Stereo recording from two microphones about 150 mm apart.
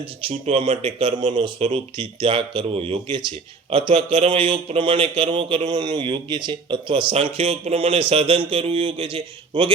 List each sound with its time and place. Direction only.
0.3 s a man's voice: 35° right (ahead or behind); by 1.4 s 50° right (ahead or behind)
1.4 s a man's voice: 40° right (ahead or behind)